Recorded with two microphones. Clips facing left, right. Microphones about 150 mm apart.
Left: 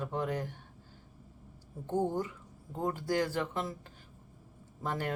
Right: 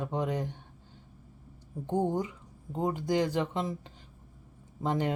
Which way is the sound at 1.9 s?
15° right (ahead or behind).